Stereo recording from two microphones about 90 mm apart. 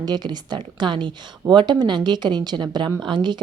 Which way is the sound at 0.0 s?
50° right (ahead or behind).